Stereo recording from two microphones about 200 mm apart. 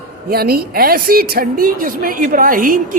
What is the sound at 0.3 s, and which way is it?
A woman's voice, 50° right (ahead or behind).